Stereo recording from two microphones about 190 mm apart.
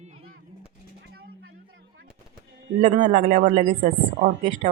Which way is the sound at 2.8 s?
40° right (ahead or behind).